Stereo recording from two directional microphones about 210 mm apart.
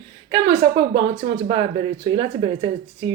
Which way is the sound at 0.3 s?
30° right (ahead or behind).